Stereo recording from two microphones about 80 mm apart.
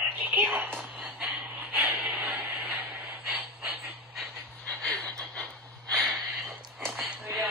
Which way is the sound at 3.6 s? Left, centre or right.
Centre.